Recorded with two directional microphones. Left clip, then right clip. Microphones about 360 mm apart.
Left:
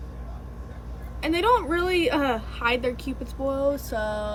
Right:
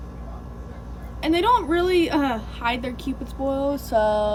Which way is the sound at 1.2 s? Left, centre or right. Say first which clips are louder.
Right 2 dB; centre.